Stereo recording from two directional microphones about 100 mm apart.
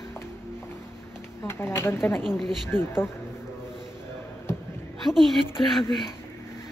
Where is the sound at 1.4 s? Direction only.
25° left (ahead or behind).